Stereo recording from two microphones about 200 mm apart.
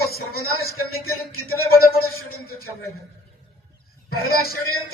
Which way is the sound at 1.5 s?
50° left (ahead or behind).